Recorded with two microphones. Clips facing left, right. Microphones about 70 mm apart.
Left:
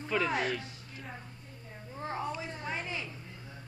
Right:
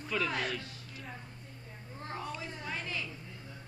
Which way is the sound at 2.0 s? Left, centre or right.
Centre.